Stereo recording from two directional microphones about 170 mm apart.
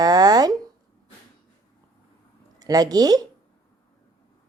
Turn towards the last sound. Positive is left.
turn(degrees=-20)  # may be behind; listen again after turning